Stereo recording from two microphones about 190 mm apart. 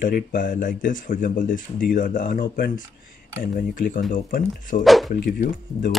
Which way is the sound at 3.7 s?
45° left (ahead or behind).